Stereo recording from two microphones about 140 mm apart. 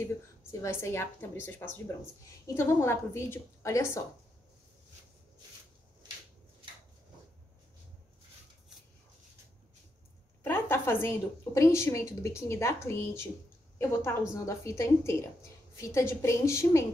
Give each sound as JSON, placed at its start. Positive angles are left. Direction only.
{"t": 0.0, "sound": "a woman's voice", "side_deg": 20}
{"t": 10.4, "sound": "a woman's voice", "side_deg": 15}
{"t": 14.3, "sound": "a woman's voice", "side_deg": 20}